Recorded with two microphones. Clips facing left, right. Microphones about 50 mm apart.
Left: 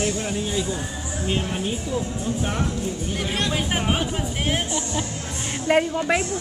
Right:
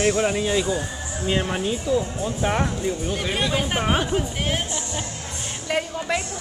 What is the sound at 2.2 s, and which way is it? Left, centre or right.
Speech, right.